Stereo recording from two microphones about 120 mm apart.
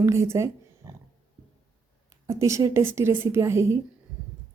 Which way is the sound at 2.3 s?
25° right (ahead or behind).